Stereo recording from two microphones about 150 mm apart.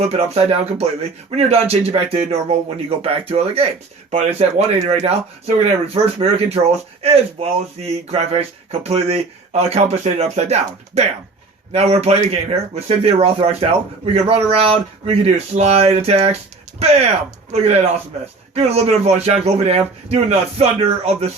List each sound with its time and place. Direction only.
0.0 s speech: 40° right (ahead or behind)